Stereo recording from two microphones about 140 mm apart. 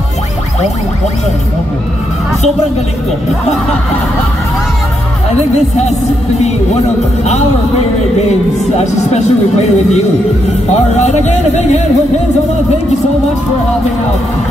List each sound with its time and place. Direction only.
8.7 s speech: 50° left (ahead or behind)